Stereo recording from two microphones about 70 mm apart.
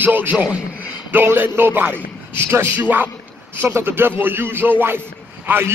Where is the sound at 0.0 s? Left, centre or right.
Right.